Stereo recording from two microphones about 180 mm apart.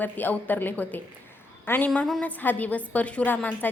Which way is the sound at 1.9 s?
Centre (ahead or behind).